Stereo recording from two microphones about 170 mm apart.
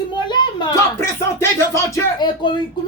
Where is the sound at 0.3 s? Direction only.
25° left (ahead or behind).